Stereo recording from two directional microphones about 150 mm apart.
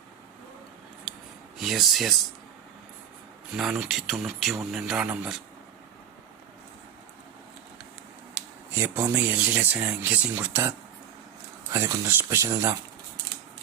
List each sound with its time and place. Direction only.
1.5 s speech: centre (ahead or behind)
3.5 s speech: 5° right (ahead or behind)
8.7 s speech: 15° right (ahead or behind)